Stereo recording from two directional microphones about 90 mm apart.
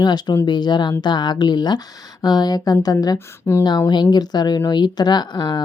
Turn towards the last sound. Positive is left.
turn(degrees=55)  # may be behind; listen again after turning